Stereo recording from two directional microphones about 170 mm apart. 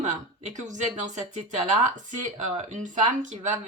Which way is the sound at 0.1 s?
45° right (ahead or behind).